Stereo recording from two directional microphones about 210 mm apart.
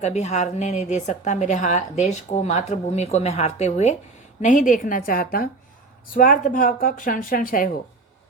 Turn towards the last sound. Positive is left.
turn(degrees=45)  # may be behind; listen again after turning